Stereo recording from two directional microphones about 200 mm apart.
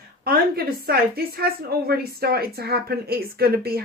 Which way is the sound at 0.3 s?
50° right (ahead or behind).